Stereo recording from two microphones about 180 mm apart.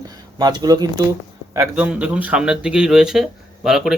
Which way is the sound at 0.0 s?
20° right (ahead or behind).